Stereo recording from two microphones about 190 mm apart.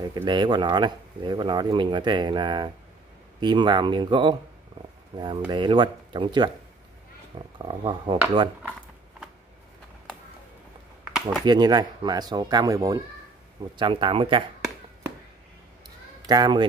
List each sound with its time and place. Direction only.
0.0 s speech: 20° right (ahead or behind)
11.4 s speech: 20° right (ahead or behind)
16.3 s speech: 25° right (ahead or behind)